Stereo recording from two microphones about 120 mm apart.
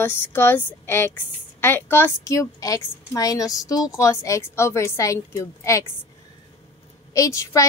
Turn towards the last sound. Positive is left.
turn(degrees=25)  # may be behind; listen again after turning